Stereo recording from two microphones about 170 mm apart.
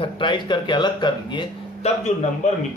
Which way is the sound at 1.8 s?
45° left (ahead or behind).